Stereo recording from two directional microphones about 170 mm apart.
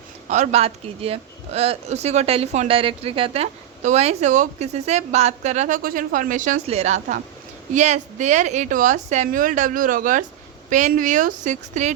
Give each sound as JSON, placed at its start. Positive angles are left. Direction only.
{"t": 0.3, "sound": "a woman's voice", "side_deg": -40}